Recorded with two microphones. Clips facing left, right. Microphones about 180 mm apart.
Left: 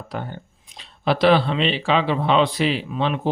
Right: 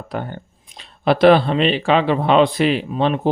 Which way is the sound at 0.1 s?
55° right (ahead or behind).